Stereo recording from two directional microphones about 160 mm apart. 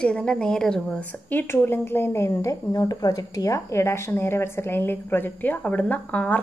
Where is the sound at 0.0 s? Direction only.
5° left (ahead or behind).